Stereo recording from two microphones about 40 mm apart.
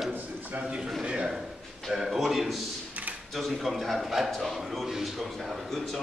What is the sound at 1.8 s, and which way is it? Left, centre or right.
A man's voice, centre.